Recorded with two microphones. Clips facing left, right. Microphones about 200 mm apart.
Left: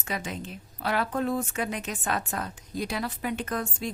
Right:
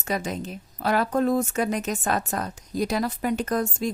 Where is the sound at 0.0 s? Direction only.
40° right (ahead or behind).